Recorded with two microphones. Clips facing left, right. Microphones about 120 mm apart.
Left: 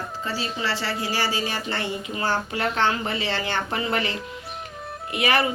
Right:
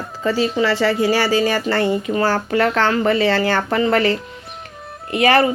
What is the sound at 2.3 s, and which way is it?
Speech, 60° right (ahead or behind).